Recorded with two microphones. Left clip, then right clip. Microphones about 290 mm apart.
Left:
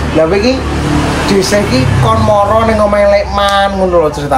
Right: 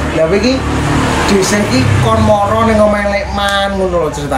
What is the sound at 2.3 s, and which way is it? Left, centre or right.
Speech, centre.